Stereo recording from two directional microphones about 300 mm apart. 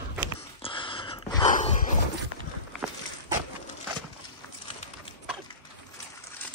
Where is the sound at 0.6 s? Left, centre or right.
Centre.